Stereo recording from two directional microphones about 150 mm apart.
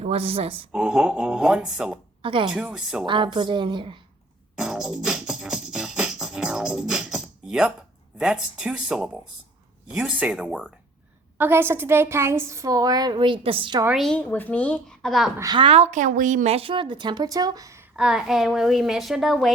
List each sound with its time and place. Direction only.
0.0 s a woman's voice: 45° right (ahead or behind)
0.5 s a woman's voice: 5° right (ahead or behind)
2.2 s a woman's voice: 35° right (ahead or behind)
2.5 s a woman's voice: 5° right (ahead or behind)
3.1 s a woman's voice: 30° right (ahead or behind)
4.5 s music: 5° right (ahead or behind)
8.2 s a woman's voice: 5° right (ahead or behind); by 13.8 s 35° right (ahead or behind)
14.0 s a woman's voice: 5° left (ahead or behind)
15.4 s a woman's voice: 30° right (ahead or behind)
17.9 s a woman's voice: 5° right (ahead or behind)